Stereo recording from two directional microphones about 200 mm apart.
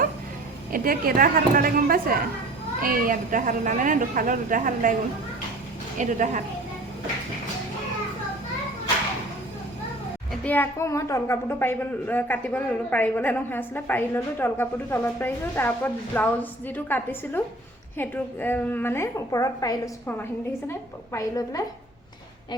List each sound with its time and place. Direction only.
0.7 s a woman's voice: 45° right (ahead or behind)
6.0 s a woman's voice: 40° right (ahead or behind)
10.4 s a woman's voice: 10° left (ahead or behind)